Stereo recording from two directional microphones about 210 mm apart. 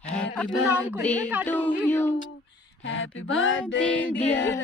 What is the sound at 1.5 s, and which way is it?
Speech, 10° right (ahead or behind).